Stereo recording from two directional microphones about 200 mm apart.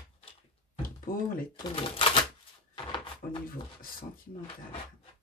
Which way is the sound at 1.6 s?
25° left (ahead or behind).